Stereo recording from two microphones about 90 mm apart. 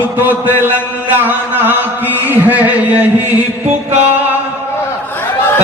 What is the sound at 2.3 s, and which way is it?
Speech, 15° right (ahead or behind).